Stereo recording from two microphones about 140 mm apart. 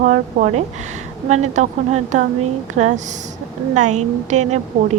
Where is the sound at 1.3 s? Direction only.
55° right (ahead or behind).